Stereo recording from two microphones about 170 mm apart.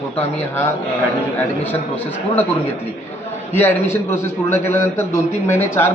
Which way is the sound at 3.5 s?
15° left (ahead or behind).